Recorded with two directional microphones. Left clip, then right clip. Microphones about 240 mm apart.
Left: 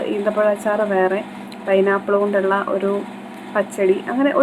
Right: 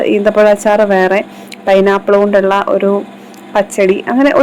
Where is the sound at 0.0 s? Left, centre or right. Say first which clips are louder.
Right 9 dB; right.